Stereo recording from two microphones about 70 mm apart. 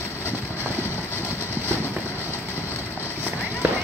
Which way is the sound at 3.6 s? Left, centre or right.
Right.